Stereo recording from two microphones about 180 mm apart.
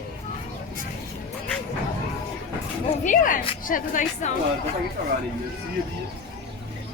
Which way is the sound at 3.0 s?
45° left (ahead or behind).